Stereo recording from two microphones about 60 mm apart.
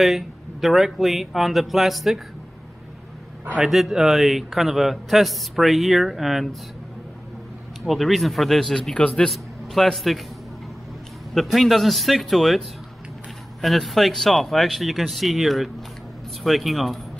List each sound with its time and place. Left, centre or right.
0.0 s a man's voice: centre
3.5 s a man's voice: centre
7.8 s a man's voice: centre
9.3 s a man's voice: centre
11.3 s a man's voice: centre